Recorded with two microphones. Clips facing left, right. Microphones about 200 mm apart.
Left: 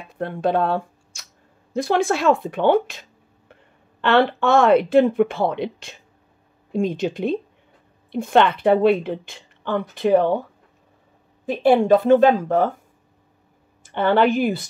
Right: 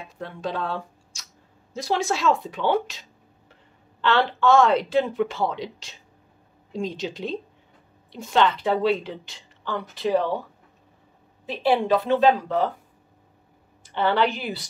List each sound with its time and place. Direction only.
0.1 s a woman's voice: 55° left (ahead or behind)
11.4 s a woman's voice: 50° left (ahead or behind)
13.8 s a woman's voice: 50° left (ahead or behind)